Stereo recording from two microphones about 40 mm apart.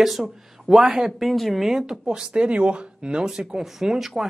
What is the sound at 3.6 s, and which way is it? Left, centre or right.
Speech, centre.